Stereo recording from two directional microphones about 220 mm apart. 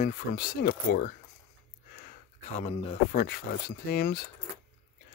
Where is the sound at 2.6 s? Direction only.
30° left (ahead or behind).